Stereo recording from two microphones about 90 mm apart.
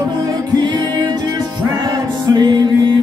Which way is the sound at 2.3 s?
55° right (ahead or behind).